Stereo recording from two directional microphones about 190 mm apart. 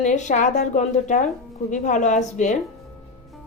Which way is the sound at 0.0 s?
40° left (ahead or behind).